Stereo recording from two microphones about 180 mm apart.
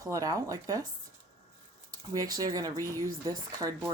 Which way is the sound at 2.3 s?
20° right (ahead or behind).